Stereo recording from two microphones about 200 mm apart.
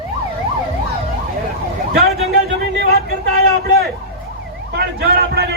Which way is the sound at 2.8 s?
50° right (ahead or behind).